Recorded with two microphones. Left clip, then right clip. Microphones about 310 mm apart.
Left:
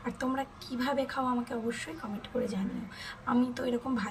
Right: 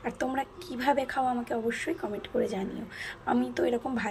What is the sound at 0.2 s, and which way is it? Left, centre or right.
Speech, centre.